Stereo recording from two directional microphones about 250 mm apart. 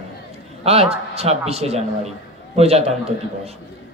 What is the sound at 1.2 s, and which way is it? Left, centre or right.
A man's voice, right.